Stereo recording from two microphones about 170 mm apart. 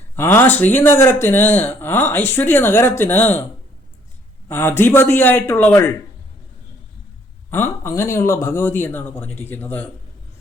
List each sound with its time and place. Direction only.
0.2 s speech: 15° left (ahead or behind)
4.4 s speech: 15° left (ahead or behind)
7.5 s speech: 15° left (ahead or behind)